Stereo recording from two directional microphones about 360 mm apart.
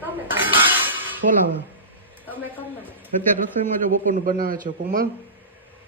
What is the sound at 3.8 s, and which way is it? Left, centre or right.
A man's voice, right.